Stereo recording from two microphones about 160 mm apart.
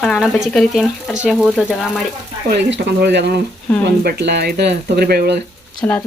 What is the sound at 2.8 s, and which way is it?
Speech, 90° right.